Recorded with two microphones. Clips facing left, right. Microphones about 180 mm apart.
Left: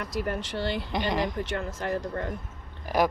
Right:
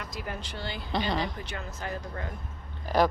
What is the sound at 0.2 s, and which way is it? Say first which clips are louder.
Speech: left 8 dB; 65° left (ahead or behind).